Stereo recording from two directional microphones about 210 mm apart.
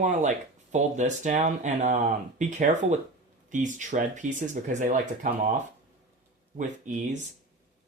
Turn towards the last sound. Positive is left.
turn(degrees=-35)  # may be behind; listen again after turning